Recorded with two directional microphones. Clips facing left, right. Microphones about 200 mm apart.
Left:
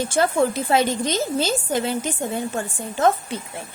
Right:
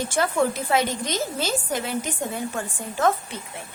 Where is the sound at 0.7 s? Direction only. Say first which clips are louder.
Left 3 dB; 30° left (ahead or behind).